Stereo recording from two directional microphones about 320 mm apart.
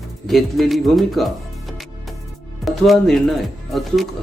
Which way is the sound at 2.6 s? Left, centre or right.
Centre.